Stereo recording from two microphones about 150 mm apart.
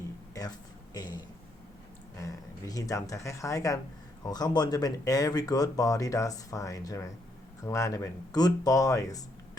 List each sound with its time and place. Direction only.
0.9 s speech: 25° left (ahead or behind)
2.2 s speech: 25° left (ahead or behind)